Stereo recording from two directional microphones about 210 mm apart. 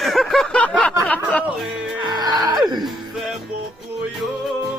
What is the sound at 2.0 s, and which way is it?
Music, 20° right (ahead or behind).